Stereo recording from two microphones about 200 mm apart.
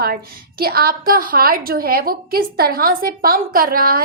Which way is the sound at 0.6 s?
50° right (ahead or behind).